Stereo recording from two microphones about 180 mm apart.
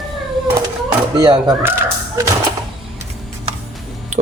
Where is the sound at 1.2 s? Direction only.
25° right (ahead or behind).